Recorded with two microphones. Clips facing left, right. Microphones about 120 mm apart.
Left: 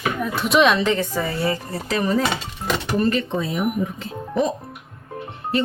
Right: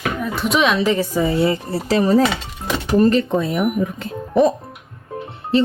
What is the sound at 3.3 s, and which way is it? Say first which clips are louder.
Speech: right 5 dB; 55° right (ahead or behind).